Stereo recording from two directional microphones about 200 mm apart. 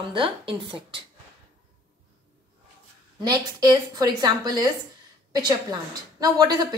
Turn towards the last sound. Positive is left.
turn(degrees=-20)  # may be behind; listen again after turning